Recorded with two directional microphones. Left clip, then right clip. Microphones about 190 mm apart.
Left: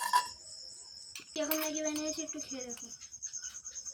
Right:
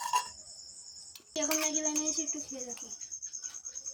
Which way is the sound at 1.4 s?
15° right (ahead or behind).